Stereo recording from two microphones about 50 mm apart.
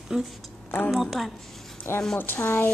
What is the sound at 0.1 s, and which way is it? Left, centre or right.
Speech, centre.